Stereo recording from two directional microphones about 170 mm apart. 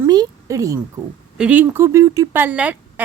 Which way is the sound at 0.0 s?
20° right (ahead or behind).